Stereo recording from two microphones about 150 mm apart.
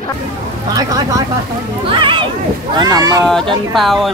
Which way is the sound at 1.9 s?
35° right (ahead or behind).